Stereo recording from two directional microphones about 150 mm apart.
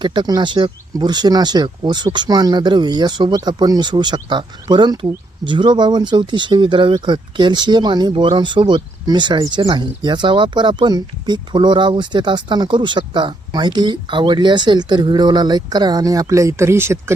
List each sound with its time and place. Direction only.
0.0 s speech: 30° right (ahead or behind)